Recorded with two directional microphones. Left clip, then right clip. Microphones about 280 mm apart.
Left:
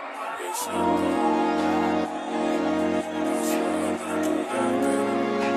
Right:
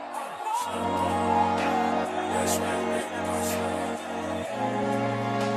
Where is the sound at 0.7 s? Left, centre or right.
Centre.